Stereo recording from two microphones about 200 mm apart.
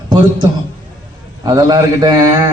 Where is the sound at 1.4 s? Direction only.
20° right (ahead or behind).